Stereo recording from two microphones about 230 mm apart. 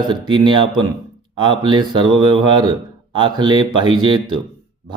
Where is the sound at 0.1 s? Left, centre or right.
Centre.